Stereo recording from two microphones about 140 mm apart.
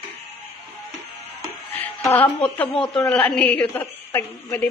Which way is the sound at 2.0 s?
15° left (ahead or behind).